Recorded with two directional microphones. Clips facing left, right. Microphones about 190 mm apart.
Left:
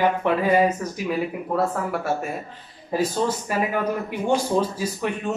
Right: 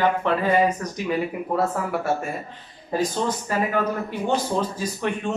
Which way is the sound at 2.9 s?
10° left (ahead or behind).